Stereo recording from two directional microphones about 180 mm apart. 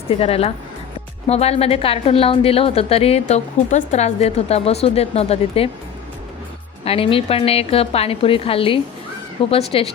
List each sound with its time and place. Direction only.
0.1 s a woman's voice: 35° left (ahead or behind)
6.8 s a woman's voice: 30° left (ahead or behind)